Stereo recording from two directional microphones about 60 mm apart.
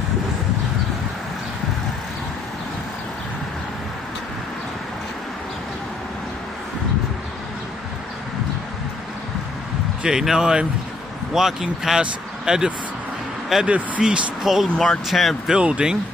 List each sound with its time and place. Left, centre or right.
10.0 s speech: centre
14.4 s speech: centre
15.5 s speech: centre